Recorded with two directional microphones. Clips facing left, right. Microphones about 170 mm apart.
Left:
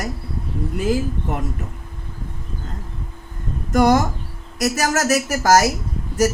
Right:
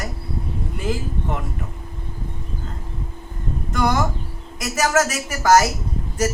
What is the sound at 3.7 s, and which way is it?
Speech, 40° left (ahead or behind).